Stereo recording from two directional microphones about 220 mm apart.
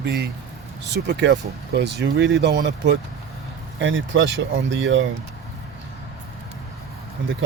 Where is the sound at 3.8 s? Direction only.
60° right (ahead or behind).